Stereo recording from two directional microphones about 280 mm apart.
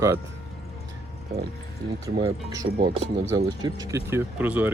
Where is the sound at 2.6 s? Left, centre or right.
Right.